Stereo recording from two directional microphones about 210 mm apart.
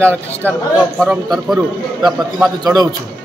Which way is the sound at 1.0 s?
Centre (ahead or behind).